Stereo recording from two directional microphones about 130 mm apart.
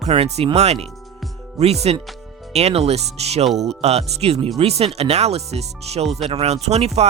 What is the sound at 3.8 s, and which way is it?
Speech, 55° right (ahead or behind).